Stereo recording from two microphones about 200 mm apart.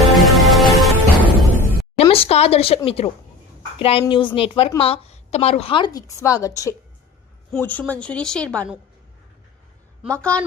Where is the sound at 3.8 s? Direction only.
30° left (ahead or behind); by 8.6 s 5° left (ahead or behind).